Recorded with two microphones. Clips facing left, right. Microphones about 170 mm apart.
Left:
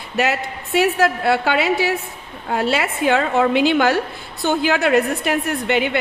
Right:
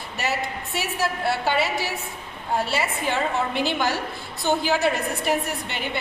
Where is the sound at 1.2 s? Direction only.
65° left (ahead or behind).